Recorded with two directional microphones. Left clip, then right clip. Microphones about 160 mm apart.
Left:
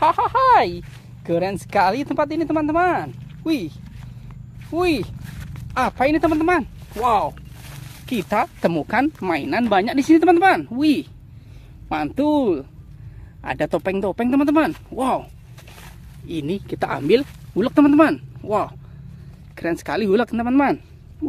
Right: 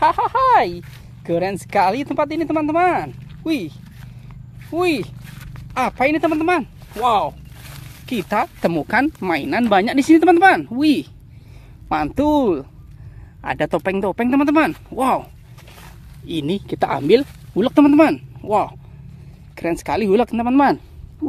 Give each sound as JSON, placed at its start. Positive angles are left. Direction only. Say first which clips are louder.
{"t": 0.0, "sound": "speech", "louder": "right 1 dB", "side_deg": -10}
{"t": 4.6, "sound": "dog", "louder": "right 1 dB", "side_deg": -10}
{"t": 5.8, "sound": "speech", "louder": "right 1 dB", "side_deg": -5}
{"t": 16.3, "sound": "speech", "louder": "right 3 dB", "side_deg": -35}